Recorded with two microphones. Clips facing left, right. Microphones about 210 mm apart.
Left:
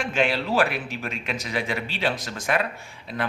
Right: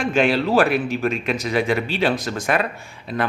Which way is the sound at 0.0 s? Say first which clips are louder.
Right 6 dB; 50° right (ahead or behind).